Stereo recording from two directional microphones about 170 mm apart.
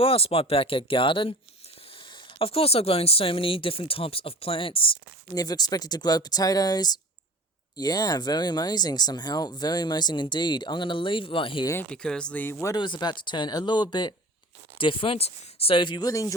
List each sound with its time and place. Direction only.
0.0 s speech: 35° left (ahead or behind)
2.4 s speech: 35° left (ahead or behind)
11.7 s speech: 10° left (ahead or behind)
12.7 s speech: 25° left (ahead or behind)